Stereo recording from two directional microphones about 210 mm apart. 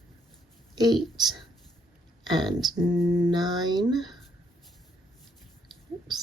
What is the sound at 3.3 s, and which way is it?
Speech, 20° right (ahead or behind).